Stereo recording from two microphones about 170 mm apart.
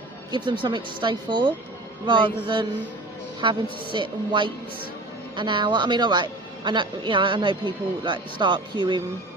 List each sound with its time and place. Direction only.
0.3 s speech: 25° right (ahead or behind)